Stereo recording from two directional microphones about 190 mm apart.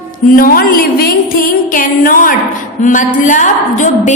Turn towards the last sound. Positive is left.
turn(degrees=40)  # may be behind; listen again after turning